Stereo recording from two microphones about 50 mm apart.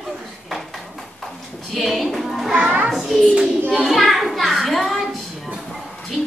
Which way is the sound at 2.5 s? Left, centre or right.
Right.